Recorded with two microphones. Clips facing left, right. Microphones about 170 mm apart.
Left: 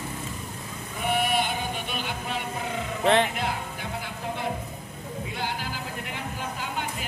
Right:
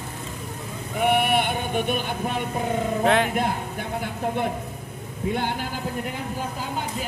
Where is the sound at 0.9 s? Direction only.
60° right (ahead or behind).